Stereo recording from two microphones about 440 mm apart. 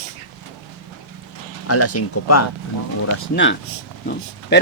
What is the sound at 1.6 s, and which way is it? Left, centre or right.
Speech, left.